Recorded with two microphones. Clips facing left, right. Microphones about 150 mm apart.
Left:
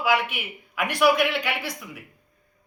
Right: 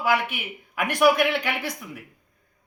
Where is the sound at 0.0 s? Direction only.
50° right (ahead or behind).